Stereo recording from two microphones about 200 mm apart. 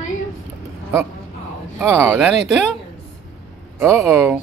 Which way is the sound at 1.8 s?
10° right (ahead or behind).